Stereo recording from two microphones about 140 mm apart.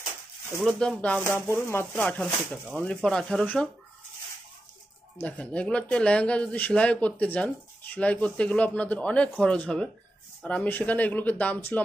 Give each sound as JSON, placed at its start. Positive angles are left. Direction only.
{"t": 0.6, "sound": "speech", "side_deg": 5}
{"t": 5.2, "sound": "speech", "side_deg": 10}